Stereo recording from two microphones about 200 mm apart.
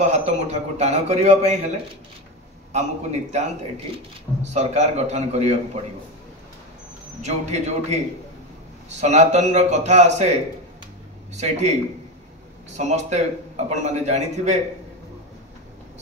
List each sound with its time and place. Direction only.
0.0 s a man's voice: 35° right (ahead or behind)
7.2 s a man's voice: 35° right (ahead or behind)
9.0 s a man's voice: 35° right (ahead or behind)
12.7 s a man's voice: 35° right (ahead or behind)